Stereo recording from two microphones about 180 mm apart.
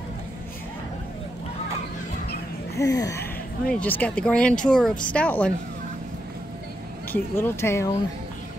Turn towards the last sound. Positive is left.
turn(degrees=15)  # may be behind; listen again after turning